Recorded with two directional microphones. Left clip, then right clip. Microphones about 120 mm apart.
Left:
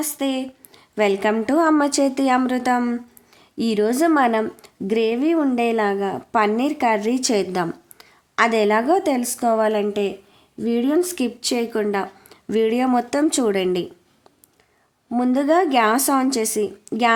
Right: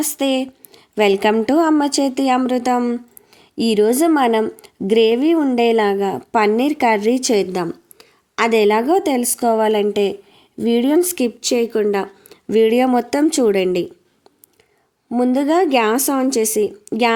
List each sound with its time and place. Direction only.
0.0 s speech: 50° right (ahead or behind)
0.7 s a sound: 35° right (ahead or behind)
1.4 s a woman's voice: 30° right (ahead or behind)
1.7 s speech: 20° right (ahead or behind)
15.1 s speech: 25° right (ahead or behind)